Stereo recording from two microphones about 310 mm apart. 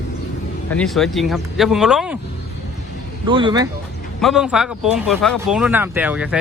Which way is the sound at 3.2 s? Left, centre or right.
Centre.